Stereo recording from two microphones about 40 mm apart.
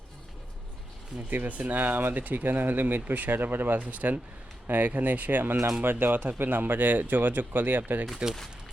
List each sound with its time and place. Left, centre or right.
1.3 s speech: right
3.8 s speech: right
4.6 s speech: right
5.8 s speech: right
8.0 s speech: centre